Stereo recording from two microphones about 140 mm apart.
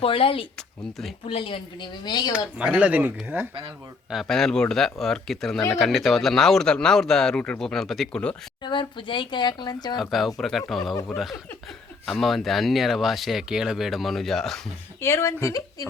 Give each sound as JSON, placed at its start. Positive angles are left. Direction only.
{"t": 0.0, "sound": "speech", "side_deg": 40}
{"t": 2.6, "sound": "speech", "side_deg": -10}
{"t": 4.1, "sound": "speech", "side_deg": 0}
{"t": 8.6, "sound": "speech", "side_deg": 35}
{"t": 10.0, "sound": "speech", "side_deg": 0}
{"t": 12.0, "sound": "speech", "side_deg": 0}
{"t": 15.0, "sound": "speech", "side_deg": 20}